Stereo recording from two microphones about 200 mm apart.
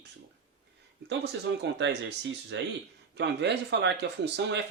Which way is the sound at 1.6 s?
60° right (ahead or behind).